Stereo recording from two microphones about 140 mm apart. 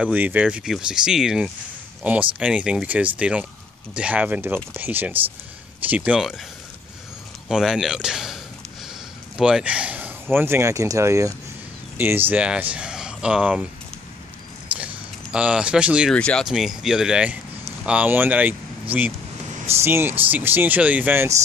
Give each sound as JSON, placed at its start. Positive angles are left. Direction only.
{"t": 0.0, "sound": "speech", "side_deg": -10}
{"t": 7.4, "sound": "speech", "side_deg": -5}
{"t": 9.4, "sound": "speech", "side_deg": -5}
{"t": 15.3, "sound": "speech", "side_deg": -10}
{"t": 16.1, "sound": "speech", "side_deg": 5}
{"t": 19.8, "sound": "speech", "side_deg": -15}